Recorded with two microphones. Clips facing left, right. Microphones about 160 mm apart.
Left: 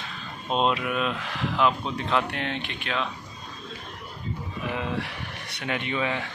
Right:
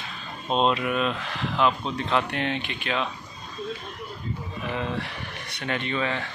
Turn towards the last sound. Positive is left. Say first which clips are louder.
# even
turn(degrees=10)  # may be behind; listen again after turning